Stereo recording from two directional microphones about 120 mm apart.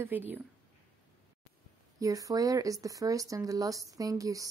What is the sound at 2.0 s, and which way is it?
Speech, 30° right (ahead or behind).